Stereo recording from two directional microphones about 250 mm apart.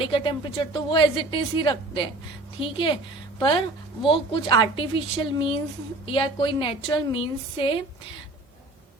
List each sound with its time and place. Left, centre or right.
0.0 s a woman's voice: centre